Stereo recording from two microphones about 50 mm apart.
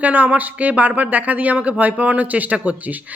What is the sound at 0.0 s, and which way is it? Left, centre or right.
Speech, right.